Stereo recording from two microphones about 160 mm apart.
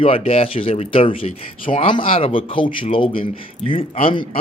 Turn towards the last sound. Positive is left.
turn(degrees=35)  # may be behind; listen again after turning